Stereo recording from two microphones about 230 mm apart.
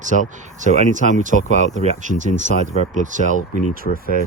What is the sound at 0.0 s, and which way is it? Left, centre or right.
Speech, right.